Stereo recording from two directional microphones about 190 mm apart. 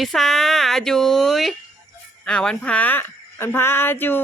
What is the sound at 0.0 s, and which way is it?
Speech, centre (ahead or behind).